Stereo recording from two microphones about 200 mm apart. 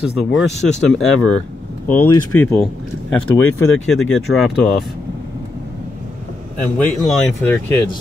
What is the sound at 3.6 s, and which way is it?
Speech, centre (ahead or behind).